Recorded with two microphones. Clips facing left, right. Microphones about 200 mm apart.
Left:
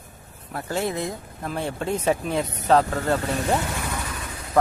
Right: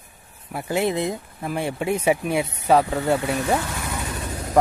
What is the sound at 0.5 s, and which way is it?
Speech, 15° right (ahead or behind).